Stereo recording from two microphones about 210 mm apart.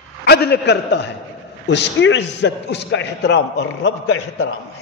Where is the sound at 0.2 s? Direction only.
50° left (ahead or behind).